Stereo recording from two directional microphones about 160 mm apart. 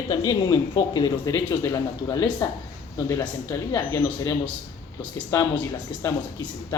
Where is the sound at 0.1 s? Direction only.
25° left (ahead or behind).